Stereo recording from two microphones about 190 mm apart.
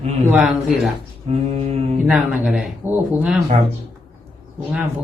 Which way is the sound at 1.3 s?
30° right (ahead or behind).